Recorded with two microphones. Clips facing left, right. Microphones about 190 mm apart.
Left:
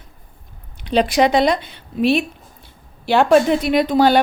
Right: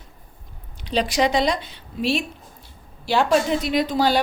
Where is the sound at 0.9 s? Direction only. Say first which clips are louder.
Left 5 dB; 60° left (ahead or behind).